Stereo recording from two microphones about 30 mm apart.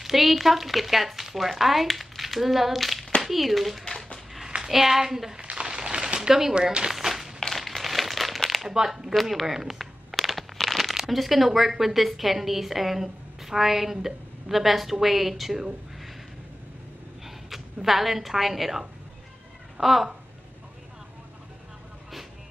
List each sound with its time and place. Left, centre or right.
0.0 s a woman's voice: centre
5.4 s a sound: right; by 7.3 s centre
7.3 s crumpling: centre
8.6 s a woman's voice: centre
9.1 s speech: centre
10.2 s a sound: centre
11.1 s a woman's voice: centre
17.5 s a woman's voice: centre